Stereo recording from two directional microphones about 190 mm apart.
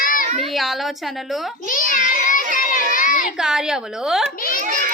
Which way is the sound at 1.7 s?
45° left (ahead or behind).